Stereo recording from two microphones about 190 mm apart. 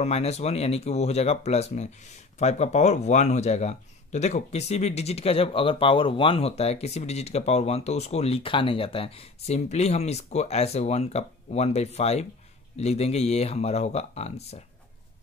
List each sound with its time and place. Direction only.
0.0 s speech: 35° left (ahead or behind)